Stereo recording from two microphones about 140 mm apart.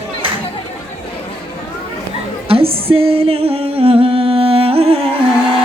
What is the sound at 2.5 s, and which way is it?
Music, 40° right (ahead or behind).